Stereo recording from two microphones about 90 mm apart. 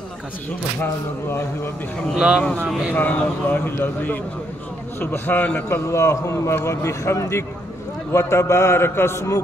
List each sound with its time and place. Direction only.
2.1 s speech: 10° right (ahead or behind)
2.9 s speech: 20° left (ahead or behind)
5.9 s a man's voice: 35° left (ahead or behind)